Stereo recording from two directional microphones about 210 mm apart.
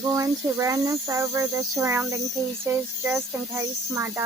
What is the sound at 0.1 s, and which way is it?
Speech, 15° right (ahead or behind).